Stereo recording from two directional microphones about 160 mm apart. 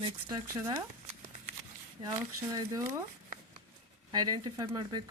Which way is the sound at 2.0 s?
20° right (ahead or behind).